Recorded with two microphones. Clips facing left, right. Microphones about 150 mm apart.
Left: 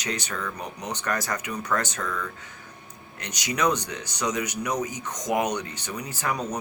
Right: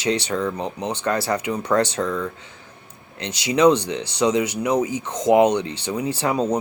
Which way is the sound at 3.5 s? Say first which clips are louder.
Right 9 dB; 30° right (ahead or behind).